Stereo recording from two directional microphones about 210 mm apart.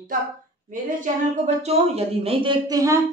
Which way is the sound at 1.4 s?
30° right (ahead or behind).